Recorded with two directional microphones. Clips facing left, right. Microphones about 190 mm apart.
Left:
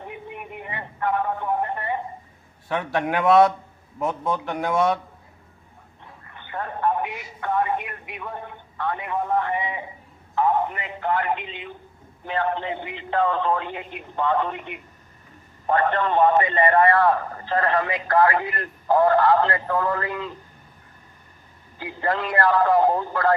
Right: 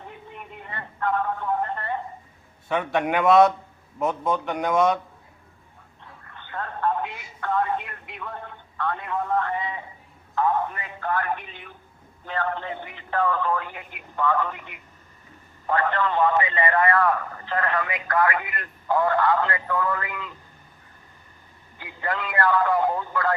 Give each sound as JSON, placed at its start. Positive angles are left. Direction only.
{"t": 0.0, "sound": "a sound", "side_deg": 15}
{"t": 2.6, "sound": "speech", "side_deg": 0}
{"t": 6.3, "sound": "telephone", "side_deg": 15}
{"t": 8.1, "sound": "a man's voice", "side_deg": 15}
{"t": 16.2, "sound": "speech", "side_deg": 45}
{"t": 16.9, "sound": "speech", "side_deg": 30}
{"t": 21.8, "sound": "speech", "side_deg": 35}